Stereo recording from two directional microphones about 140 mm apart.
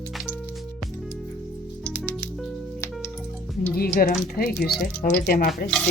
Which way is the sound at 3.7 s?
90° left.